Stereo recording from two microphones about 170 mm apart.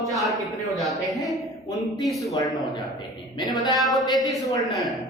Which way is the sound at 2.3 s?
20° left (ahead or behind).